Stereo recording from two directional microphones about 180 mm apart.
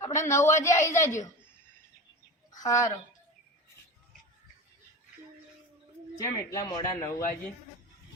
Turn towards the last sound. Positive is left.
turn(degrees=20)  # may be behind; listen again after turning